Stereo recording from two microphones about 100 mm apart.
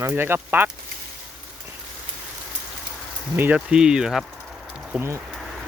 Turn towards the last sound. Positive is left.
turn(degrees=-5)  # may be behind; listen again after turning